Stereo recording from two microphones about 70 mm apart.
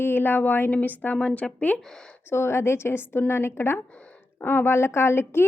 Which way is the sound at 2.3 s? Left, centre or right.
Left.